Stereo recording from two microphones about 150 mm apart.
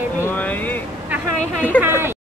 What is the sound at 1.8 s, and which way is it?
Speech, 15° right (ahead or behind).